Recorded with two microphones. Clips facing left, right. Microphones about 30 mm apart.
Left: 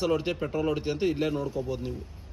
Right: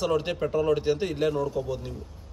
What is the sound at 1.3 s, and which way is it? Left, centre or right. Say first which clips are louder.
Speech: right 3 dB; centre.